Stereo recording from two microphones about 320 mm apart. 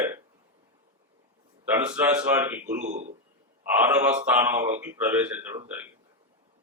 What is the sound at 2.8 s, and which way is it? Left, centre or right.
Speech, right.